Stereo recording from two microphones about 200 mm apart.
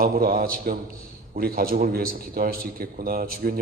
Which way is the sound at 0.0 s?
45° right (ahead or behind).